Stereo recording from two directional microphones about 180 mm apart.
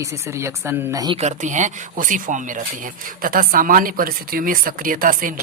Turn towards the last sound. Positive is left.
turn(degrees=-50)  # may be behind; listen again after turning